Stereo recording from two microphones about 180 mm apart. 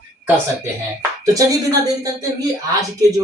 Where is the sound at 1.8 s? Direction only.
20° right (ahead or behind).